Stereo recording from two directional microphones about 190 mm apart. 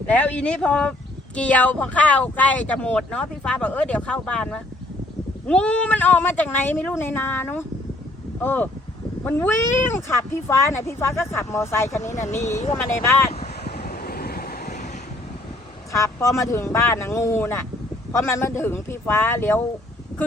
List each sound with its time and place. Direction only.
0.1 s speech: 5° left (ahead or behind)
12.0 s speech: 40° left (ahead or behind)
12.3 s speech: 15° left (ahead or behind)
13.7 s vehicle: 55° left (ahead or behind)
15.9 s speech: 15° left (ahead or behind)